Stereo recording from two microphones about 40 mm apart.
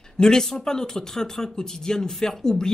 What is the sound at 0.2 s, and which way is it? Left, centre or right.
Speech, centre.